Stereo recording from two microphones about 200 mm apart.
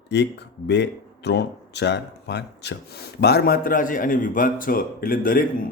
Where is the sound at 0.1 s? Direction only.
60° left (ahead or behind).